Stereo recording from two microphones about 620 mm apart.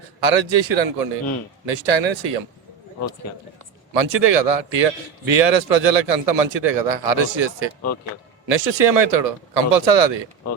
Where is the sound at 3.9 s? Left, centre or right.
Right.